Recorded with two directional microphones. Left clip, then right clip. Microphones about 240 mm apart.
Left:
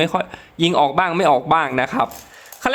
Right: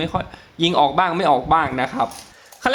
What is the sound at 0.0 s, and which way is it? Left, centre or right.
A man's voice, centre.